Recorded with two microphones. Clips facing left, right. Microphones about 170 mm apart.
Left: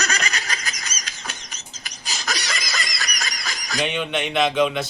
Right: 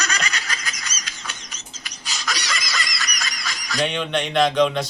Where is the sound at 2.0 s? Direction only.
45° left (ahead or behind).